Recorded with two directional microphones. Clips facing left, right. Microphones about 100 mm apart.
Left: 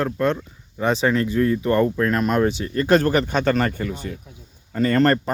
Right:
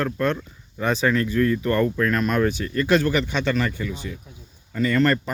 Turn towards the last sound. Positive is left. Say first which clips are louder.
# left 2 dB
turn(degrees=45)  # may be behind; listen again after turning